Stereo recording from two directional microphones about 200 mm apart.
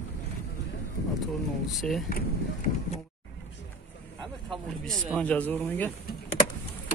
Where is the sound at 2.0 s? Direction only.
45° left (ahead or behind).